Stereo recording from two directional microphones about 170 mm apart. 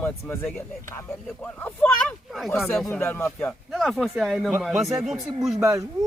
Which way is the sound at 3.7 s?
Centre (ahead or behind).